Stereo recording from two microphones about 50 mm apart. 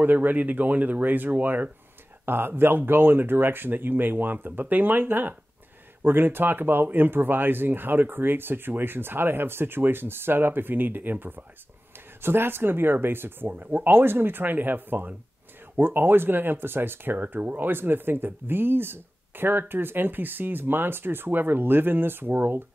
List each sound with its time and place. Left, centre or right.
0.0 s speech: right
2.2 s speech: right